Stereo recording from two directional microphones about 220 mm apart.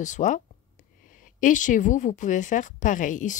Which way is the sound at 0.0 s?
35° left (ahead or behind).